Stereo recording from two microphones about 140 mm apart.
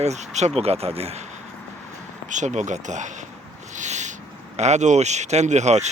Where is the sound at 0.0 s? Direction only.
55° right (ahead or behind).